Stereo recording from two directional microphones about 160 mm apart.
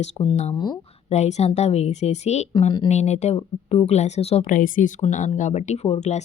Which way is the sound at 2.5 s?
30° left (ahead or behind).